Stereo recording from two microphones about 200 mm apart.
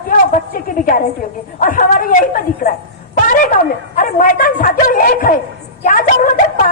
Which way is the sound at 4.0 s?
40° left (ahead or behind).